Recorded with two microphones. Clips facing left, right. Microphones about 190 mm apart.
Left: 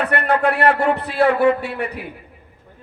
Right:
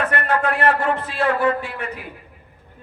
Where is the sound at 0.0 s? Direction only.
65° left (ahead or behind).